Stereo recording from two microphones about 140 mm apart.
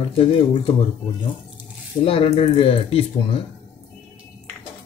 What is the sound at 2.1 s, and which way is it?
Speech, 40° left (ahead or behind).